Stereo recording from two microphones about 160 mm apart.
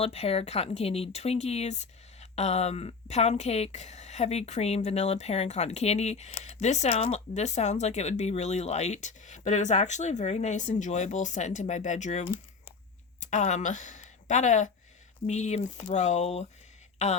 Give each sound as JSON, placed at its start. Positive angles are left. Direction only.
{"t": 0.0, "sound": "speech", "side_deg": 40}
{"t": 13.3, "sound": "speech", "side_deg": 50}